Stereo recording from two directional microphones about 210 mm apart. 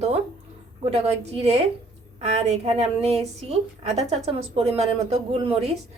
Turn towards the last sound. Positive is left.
turn(degrees=-30)  # may be behind; listen again after turning